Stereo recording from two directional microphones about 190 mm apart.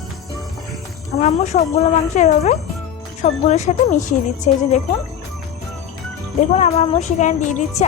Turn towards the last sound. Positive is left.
turn(degrees=40)  # may be behind; listen again after turning